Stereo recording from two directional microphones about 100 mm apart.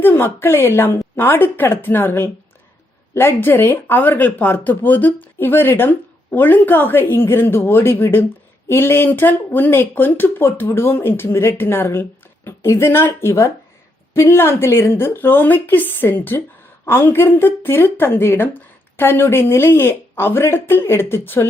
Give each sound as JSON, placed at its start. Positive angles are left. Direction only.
{"t": 0.0, "sound": "speech", "side_deg": 20}